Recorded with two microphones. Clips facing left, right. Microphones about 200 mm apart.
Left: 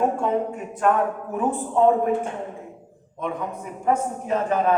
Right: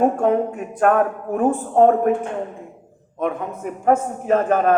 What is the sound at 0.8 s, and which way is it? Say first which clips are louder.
A man's voice: right 4 dB; 55° right (ahead or behind).